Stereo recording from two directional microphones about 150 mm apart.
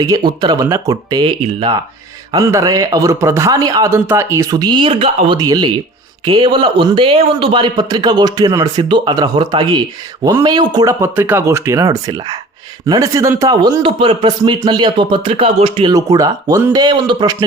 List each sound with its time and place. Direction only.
0.0 s speech: 25° right (ahead or behind)
2.3 s speech: 20° right (ahead or behind); by 5.4 s 35° right (ahead or behind)
5.4 s a man's voice: 25° right (ahead or behind)
15.9 s speech: 25° right (ahead or behind)